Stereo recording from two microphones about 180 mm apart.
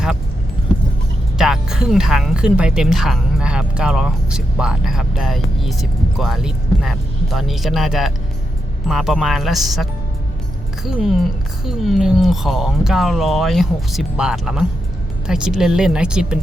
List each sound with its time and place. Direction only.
1.4 s speech: 5° right (ahead or behind)